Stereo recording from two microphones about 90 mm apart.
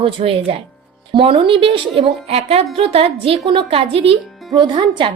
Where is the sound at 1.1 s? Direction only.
70° right (ahead or behind); by 4.1 s 90° right.